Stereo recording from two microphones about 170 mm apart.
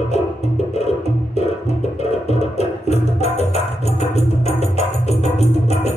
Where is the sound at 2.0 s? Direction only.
40° left (ahead or behind).